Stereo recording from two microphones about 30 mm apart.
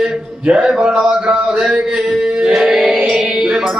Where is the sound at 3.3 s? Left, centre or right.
Right.